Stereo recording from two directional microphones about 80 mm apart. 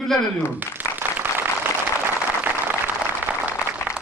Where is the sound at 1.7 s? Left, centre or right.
Right.